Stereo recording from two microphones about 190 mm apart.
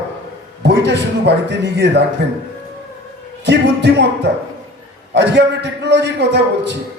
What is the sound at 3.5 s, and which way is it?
Speech, 65° right (ahead or behind).